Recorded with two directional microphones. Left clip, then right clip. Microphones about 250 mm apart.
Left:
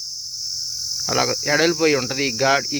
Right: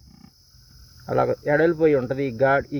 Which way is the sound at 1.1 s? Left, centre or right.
Left.